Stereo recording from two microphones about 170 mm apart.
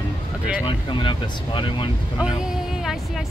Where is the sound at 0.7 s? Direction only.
30° left (ahead or behind).